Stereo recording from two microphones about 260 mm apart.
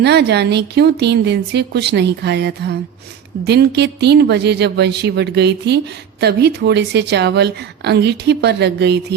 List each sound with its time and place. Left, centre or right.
0.0 s speech: right